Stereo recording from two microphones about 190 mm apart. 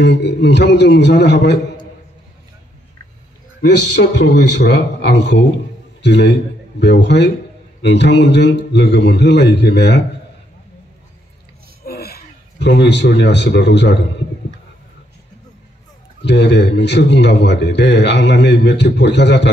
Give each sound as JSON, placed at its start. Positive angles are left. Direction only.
{"t": 0.0, "sound": "a man's voice", "side_deg": 65}
{"t": 3.6, "sound": "a man's voice", "side_deg": 65}
{"t": 11.8, "sound": "speech", "side_deg": 55}
{"t": 16.2, "sound": "a man's voice", "side_deg": 65}